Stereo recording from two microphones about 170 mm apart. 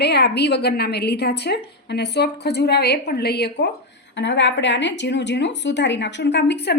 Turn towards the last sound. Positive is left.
turn(degrees=80)